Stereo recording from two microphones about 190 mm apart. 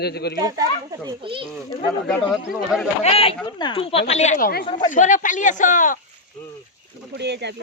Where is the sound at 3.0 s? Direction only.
30° left (ahead or behind).